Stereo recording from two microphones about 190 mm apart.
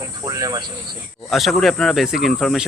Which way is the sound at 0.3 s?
20° right (ahead or behind).